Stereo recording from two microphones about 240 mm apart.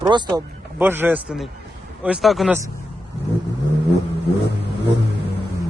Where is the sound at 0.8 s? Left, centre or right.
Centre.